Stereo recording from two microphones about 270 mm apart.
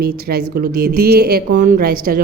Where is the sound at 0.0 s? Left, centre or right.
Right.